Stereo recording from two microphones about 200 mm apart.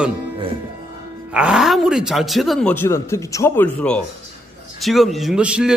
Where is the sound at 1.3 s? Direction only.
5° right (ahead or behind).